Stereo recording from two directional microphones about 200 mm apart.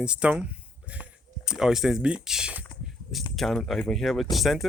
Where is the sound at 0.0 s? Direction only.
5° right (ahead or behind).